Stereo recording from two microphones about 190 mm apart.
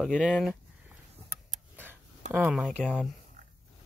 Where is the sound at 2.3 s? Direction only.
5° right (ahead or behind).